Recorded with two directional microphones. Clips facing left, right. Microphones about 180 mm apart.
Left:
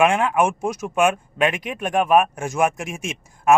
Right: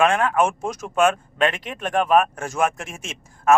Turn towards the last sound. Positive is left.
turn(degrees=15)  # may be behind; listen again after turning